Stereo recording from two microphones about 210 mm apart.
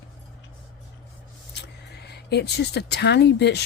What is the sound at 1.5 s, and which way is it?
Speech, 55° left (ahead or behind).